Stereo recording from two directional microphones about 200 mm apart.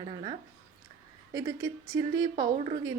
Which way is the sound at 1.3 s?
15° right (ahead or behind).